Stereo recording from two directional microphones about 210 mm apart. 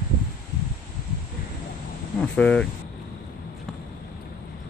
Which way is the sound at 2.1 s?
5° left (ahead or behind).